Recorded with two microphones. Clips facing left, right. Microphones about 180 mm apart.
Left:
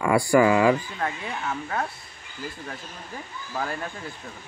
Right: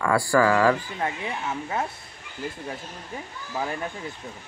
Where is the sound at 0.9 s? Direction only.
15° right (ahead or behind).